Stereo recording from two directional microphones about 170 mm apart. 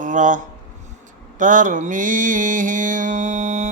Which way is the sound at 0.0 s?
50° right (ahead or behind).